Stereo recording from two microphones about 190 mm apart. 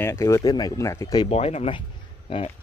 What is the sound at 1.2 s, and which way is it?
Speech, 30° left (ahead or behind).